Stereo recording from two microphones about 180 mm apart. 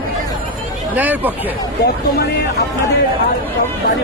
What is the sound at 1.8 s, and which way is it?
Speech, 60° left (ahead or behind).